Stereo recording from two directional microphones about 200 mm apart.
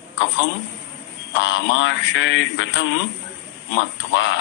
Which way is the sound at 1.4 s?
70° left (ahead or behind).